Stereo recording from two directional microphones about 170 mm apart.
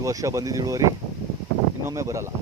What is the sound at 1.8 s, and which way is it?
Speech, 20° right (ahead or behind).